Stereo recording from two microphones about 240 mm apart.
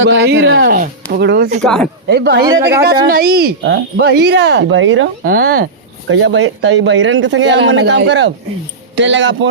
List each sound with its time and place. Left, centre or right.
0.0 s speech: right
1.6 s speech: centre
2.0 s speech: right
5.2 s speech: right
6.1 s speech: right